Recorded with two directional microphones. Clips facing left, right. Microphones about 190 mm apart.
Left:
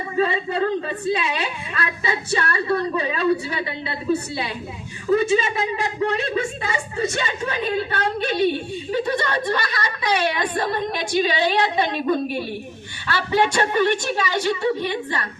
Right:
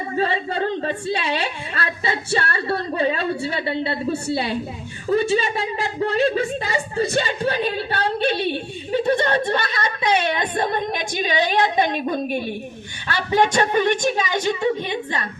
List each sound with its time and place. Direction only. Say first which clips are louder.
0.2 s a woman's voice: left 2 dB; 30° right (ahead or behind)